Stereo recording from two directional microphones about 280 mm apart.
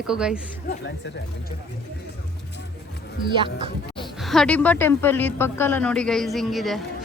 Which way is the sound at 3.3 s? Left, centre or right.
Centre.